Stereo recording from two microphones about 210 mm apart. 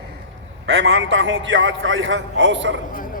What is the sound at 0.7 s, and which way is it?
A man's voice, 65° right (ahead or behind).